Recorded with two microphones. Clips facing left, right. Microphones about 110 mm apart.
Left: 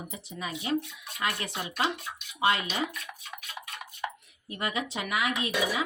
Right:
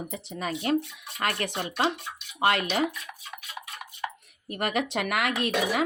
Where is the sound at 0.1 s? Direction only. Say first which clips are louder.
Right 5 dB; 60° right (ahead or behind).